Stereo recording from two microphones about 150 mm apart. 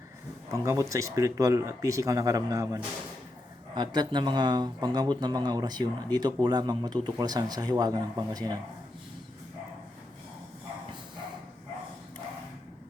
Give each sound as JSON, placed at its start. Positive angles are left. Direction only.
{"t": 0.5, "sound": "speech", "side_deg": -20}